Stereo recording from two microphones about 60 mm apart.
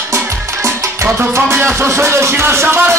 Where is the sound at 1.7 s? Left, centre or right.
Right.